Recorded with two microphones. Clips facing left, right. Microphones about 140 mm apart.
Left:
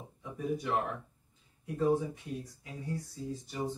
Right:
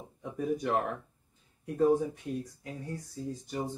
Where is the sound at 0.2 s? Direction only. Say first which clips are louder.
Right 3 dB; 50° right (ahead or behind).